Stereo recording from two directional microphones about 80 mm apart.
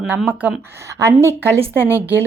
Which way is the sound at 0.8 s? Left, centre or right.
Right.